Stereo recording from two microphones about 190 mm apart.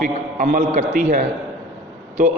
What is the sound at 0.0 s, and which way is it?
A man's voice, 45° right (ahead or behind).